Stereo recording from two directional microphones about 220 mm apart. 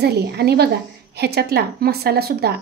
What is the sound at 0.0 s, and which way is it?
A woman's voice, 50° right (ahead or behind).